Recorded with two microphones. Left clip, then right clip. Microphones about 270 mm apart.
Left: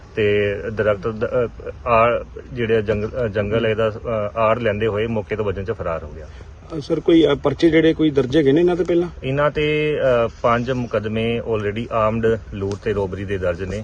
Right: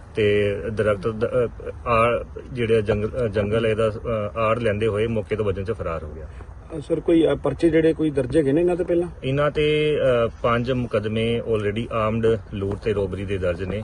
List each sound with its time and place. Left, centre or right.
0.2 s speech: centre
6.9 s speech: left
9.2 s speech: centre